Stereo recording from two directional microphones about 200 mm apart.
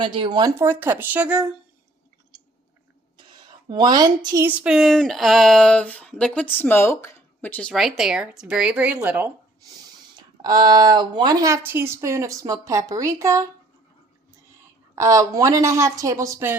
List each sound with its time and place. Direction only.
0.0 s speech: 25° right (ahead or behind); by 1.5 s 5° right (ahead or behind)
3.2 s speech: 20° right (ahead or behind)
10.2 s speech: 20° right (ahead or behind)
14.9 s speech: 15° right (ahead or behind)